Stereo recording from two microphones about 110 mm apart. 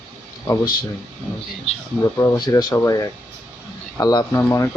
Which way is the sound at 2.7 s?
25° left (ahead or behind).